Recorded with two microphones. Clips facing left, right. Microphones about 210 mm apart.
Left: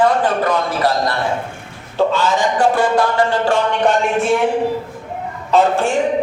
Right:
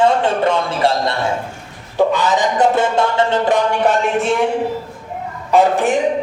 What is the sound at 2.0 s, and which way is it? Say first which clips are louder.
A man's voice: right 1 dB; 15° right (ahead or behind).